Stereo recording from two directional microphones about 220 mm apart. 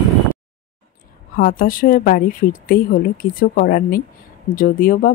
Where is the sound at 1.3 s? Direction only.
40° left (ahead or behind).